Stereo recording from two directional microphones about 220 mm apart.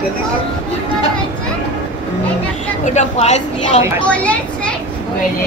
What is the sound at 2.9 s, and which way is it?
Speech, 30° left (ahead or behind).